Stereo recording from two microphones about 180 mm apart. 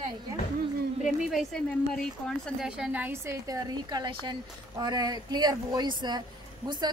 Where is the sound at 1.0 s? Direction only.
Centre (ahead or behind).